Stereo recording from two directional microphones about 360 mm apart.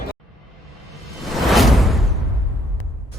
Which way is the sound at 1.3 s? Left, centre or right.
Centre.